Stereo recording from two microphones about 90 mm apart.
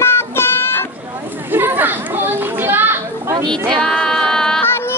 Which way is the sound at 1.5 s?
20° right (ahead or behind).